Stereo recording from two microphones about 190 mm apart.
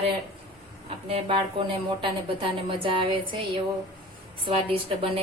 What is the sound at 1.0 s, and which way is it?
Speech, 30° right (ahead or behind).